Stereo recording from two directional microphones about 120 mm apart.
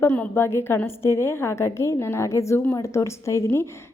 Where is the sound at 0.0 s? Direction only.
15° left (ahead or behind).